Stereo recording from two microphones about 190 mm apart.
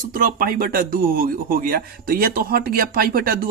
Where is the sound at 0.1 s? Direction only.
45° right (ahead or behind).